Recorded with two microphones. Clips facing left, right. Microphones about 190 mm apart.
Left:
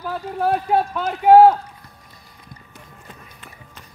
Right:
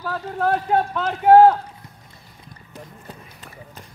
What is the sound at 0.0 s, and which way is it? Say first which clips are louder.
Speech: left 1 dB; 10° left (ahead or behind).